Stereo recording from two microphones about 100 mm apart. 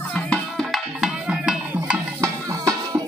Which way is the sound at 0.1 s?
10° left (ahead or behind).